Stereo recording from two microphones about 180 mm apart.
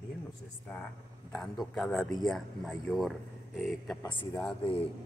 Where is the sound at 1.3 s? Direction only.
Centre (ahead or behind).